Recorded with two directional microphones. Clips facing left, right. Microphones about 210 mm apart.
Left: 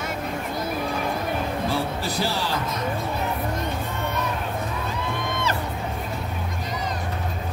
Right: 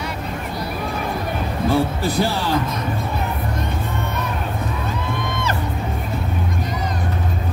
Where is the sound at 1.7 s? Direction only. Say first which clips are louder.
Right 7 dB; 55° right (ahead or behind).